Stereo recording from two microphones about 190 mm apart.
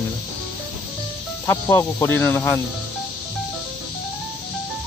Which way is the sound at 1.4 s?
15° left (ahead or behind).